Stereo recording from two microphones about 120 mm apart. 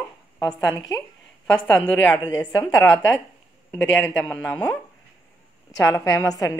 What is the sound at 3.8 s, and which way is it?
Speech, 10° left (ahead or behind).